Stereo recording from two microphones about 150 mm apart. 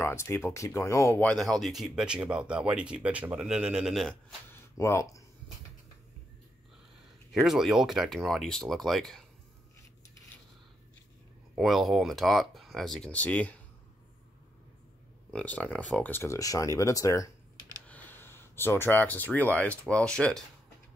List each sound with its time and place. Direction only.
0.0 s speech: 20° left (ahead or behind)
1.2 s speech: 5° left (ahead or behind)
4.5 s a sound: 20° left (ahead or behind)
7.3 s speech: centre (ahead or behind)
11.5 s speech: centre (ahead or behind)
15.3 s speech: 10° left (ahead or behind)
17.8 s speech: 10° left (ahead or behind)